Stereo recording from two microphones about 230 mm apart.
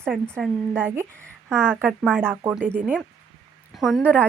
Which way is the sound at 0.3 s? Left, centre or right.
Centre.